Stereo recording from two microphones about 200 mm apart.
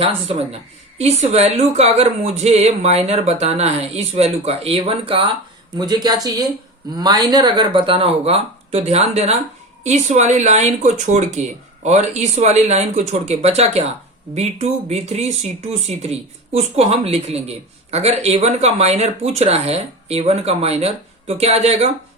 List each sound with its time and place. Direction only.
0.0 s a woman's voice: 30° right (ahead or behind)